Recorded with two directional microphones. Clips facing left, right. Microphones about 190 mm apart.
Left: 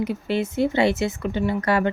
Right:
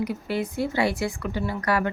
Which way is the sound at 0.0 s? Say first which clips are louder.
Left 3 dB; 25° left (ahead or behind).